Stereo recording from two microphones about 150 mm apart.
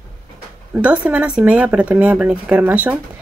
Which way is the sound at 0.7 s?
10° right (ahead or behind).